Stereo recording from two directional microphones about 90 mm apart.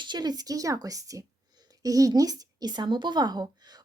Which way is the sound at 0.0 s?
55° right (ahead or behind).